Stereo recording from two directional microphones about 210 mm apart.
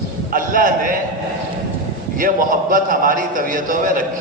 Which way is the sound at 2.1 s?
40° right (ahead or behind).